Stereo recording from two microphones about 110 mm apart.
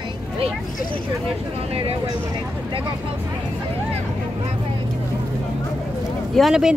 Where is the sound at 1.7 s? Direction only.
65° right (ahead or behind).